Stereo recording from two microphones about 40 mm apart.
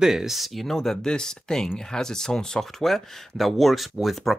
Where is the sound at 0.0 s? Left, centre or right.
Centre.